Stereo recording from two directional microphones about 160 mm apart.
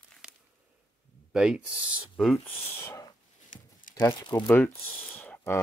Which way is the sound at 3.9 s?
25° left (ahead or behind).